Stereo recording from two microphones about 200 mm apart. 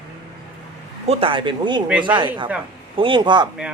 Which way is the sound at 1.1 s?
25° right (ahead or behind).